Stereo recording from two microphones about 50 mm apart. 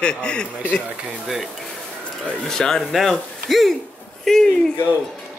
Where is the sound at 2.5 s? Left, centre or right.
Centre.